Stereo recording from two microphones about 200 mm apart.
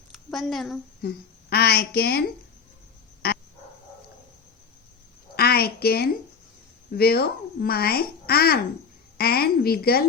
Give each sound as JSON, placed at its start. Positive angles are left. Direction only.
{"t": 0.1, "sound": "a woman's voice", "side_deg": 0}
{"t": 1.0, "sound": "a woman's voice", "side_deg": 55}
{"t": 5.4, "sound": "a sound", "side_deg": 50}
{"t": 6.9, "sound": "speech", "side_deg": 50}